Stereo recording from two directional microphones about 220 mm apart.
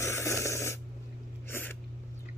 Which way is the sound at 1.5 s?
10° left (ahead or behind).